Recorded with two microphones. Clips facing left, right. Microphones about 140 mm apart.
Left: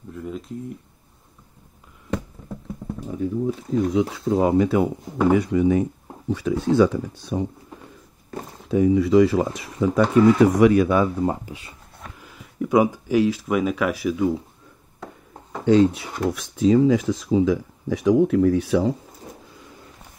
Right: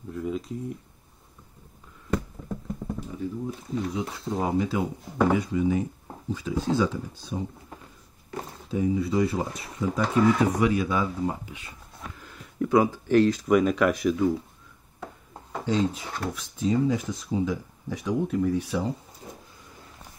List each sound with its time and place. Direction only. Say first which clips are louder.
0.1 s a sound: right 1 dB; centre (ahead or behind)
3.2 s speech: left 10 dB; 50° left (ahead or behind)
3.9 s speech: left 9 dB; 85° left; by 7.4 s 65° left (ahead or behind)
8.6 s speech: left 8 dB; 70° left (ahead or behind)
11.4 s speech: left 5 dB; 35° left (ahead or behind)
12.2 s a sound: left 1 dB; 5° left (ahead or behind)
12.7 s speech: left 2 dB; 15° left (ahead or behind)
15.6 s speech: left 10 dB; 65° left (ahead or behind)
16.3 s speech: left 8 dB; 90° left